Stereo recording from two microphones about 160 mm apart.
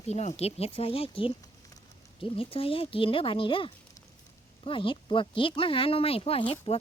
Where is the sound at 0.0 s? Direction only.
45° left (ahead or behind).